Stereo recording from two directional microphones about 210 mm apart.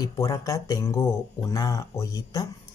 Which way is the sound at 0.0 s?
15° left (ahead or behind).